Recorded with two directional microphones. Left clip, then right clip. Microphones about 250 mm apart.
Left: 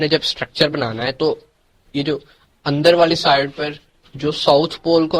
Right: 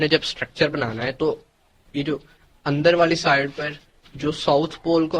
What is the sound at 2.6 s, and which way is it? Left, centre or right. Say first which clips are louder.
Speech: left 4 dB; centre.